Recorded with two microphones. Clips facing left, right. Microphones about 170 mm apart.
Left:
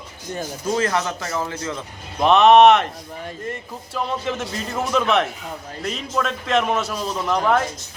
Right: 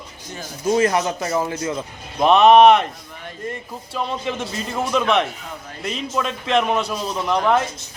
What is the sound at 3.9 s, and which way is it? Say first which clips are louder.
Speech: even; centre (ahead or behind).